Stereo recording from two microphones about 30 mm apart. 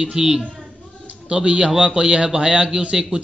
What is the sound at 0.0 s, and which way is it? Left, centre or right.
A man's voice, right.